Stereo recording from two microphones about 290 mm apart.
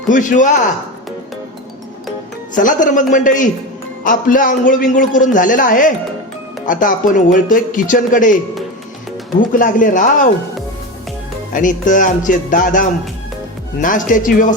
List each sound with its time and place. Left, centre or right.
0.1 s a man's voice: left
2.6 s a man's voice: left
9.4 s a man's voice: left
11.5 s a man's voice: left
13.8 s a man's voice: left